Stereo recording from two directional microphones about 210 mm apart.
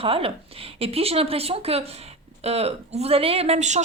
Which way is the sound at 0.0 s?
25° right (ahead or behind).